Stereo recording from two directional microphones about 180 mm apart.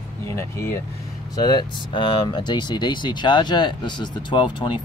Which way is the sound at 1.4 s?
25° left (ahead or behind).